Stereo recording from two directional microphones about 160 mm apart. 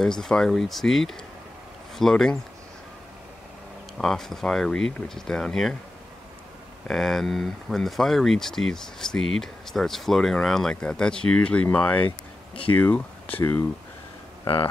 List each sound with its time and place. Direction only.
0.0 s speech: 5° left (ahead or behind)
4.0 s speech: centre (ahead or behind)
6.9 s speech: centre (ahead or behind)
14.4 s speech: 35° left (ahead or behind)